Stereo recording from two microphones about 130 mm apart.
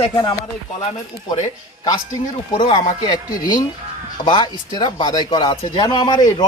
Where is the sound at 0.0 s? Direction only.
35° left (ahead or behind).